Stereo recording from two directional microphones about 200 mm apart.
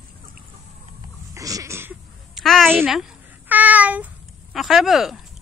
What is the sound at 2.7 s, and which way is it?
A child's voice, 5° right (ahead or behind).